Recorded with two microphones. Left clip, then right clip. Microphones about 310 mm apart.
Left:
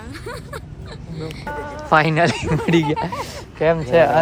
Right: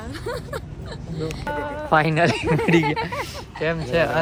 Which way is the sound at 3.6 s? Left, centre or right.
Left.